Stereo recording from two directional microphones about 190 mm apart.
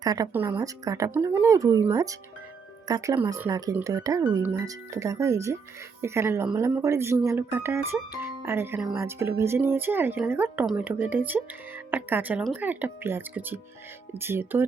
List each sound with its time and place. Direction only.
0.0 s speech: 20° right (ahead or behind)